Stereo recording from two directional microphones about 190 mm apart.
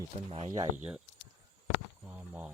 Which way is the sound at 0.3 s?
30° right (ahead or behind).